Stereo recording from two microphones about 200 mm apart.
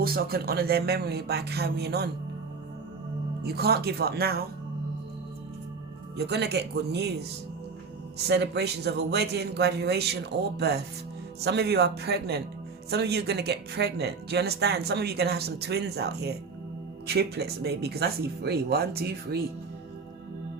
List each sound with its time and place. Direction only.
0.0 s speech: 50° right (ahead or behind)
3.4 s speech: 55° right (ahead or behind)
6.1 s speech: 55° right (ahead or behind)
8.3 s speech: 55° right (ahead or behind)